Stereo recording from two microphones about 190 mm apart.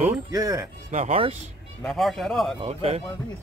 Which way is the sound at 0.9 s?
35° right (ahead or behind).